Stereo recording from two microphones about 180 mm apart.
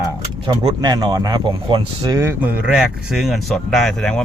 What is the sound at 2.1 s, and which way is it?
Speech, 10° right (ahead or behind).